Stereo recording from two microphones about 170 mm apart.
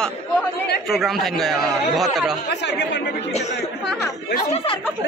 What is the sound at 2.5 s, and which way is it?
Speech, 90° left.